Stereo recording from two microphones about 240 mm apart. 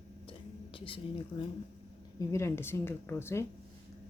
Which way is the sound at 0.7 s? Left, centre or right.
Left.